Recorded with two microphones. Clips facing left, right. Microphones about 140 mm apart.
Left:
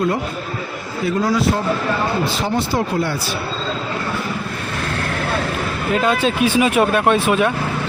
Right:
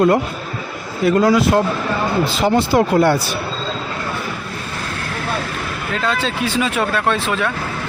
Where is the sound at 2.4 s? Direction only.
75° right (ahead or behind).